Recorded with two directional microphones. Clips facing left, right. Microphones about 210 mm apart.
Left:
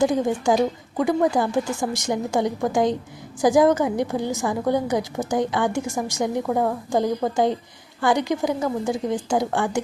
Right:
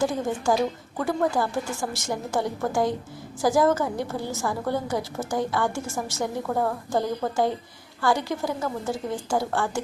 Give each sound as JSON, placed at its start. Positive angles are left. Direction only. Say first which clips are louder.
{"t": 0.0, "sound": "a woman's voice", "louder": "left 5 dB", "side_deg": 15}